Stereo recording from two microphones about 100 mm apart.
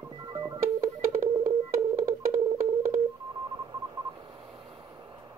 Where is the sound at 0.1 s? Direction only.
45° right (ahead or behind).